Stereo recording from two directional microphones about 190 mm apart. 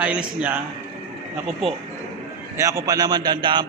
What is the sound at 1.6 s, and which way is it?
Speech, centre (ahead or behind).